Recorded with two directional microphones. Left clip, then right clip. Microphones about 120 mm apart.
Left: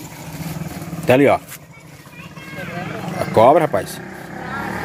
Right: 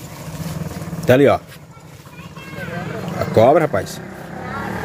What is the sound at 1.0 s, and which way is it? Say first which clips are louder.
Speech: right 1 dB; 20° right (ahead or behind).